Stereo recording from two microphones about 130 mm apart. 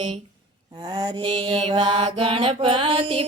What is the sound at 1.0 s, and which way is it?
Mantra, 40° right (ahead or behind).